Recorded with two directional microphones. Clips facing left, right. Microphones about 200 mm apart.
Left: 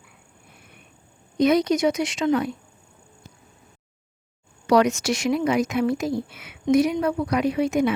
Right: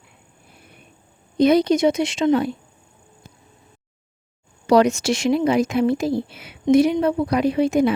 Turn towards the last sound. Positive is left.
turn(degrees=-30)  # may be behind; listen again after turning